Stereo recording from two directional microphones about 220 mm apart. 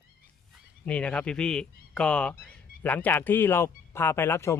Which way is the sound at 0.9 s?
5° left (ahead or behind).